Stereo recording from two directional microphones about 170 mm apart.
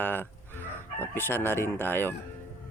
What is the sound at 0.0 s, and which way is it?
Speech, 10° left (ahead or behind).